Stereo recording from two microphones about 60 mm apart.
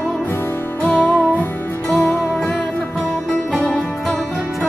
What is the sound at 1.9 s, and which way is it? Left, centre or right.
Music, left.